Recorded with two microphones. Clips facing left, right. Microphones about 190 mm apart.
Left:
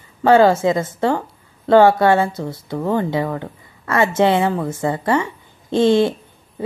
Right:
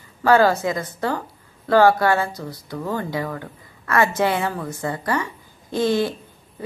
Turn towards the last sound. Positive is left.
turn(degrees=25)  # may be behind; listen again after turning